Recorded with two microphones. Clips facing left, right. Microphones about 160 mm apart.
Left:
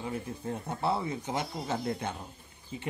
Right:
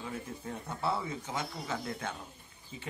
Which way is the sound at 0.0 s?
30° left (ahead or behind).